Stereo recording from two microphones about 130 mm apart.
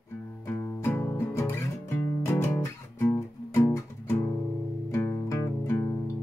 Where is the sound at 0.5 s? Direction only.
20° left (ahead or behind).